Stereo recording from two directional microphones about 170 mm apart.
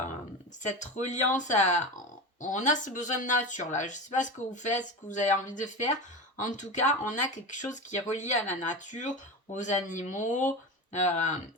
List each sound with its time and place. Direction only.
0.8 s speech: 45° left (ahead or behind)